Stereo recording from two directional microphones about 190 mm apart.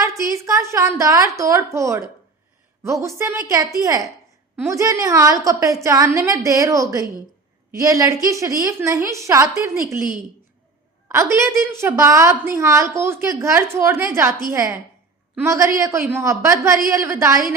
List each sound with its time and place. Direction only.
0.0 s a woman's voice: 15° right (ahead or behind)
11.1 s a woman's voice: 15° right (ahead or behind)